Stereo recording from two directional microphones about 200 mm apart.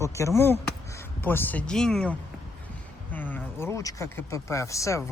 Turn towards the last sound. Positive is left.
turn(degrees=15)  # may be behind; listen again after turning